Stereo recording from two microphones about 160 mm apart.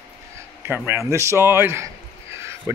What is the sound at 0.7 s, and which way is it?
A man's voice, 10° right (ahead or behind).